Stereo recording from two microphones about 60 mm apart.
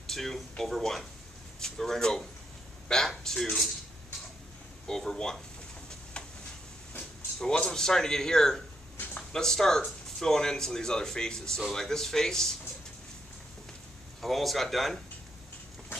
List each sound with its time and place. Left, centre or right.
0.0 s speech: centre
4.8 s speech: centre
6.2 s a sound: centre
7.3 s speech: centre
14.2 s speech: centre